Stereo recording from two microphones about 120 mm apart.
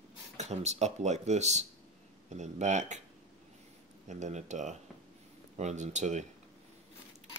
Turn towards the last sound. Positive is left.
turn(degrees=-80)